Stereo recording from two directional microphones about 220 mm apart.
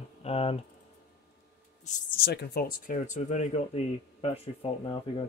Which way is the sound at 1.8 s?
45° left (ahead or behind).